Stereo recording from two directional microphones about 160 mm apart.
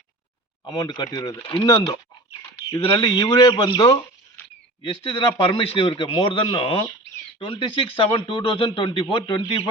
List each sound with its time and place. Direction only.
0.6 s a man's voice: 25° left (ahead or behind)
1.4 s a man's voice: 35° left (ahead or behind)